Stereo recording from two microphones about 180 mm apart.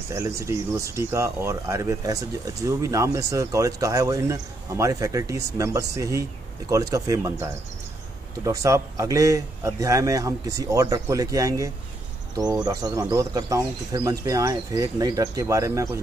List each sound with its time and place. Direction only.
0.1 s speech: 15° right (ahead or behind)